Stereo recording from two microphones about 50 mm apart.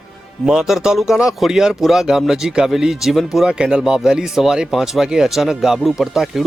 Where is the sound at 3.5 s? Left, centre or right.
Centre.